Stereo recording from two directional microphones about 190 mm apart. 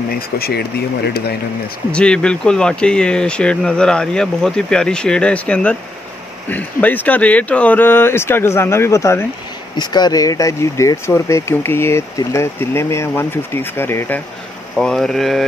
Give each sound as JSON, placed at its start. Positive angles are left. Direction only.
{"t": 0.4, "sound": "speech", "side_deg": 55}
{"t": 1.9, "sound": "speech", "side_deg": 5}